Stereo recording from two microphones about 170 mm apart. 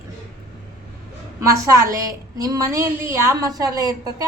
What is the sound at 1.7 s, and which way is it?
A woman's voice, 20° right (ahead or behind).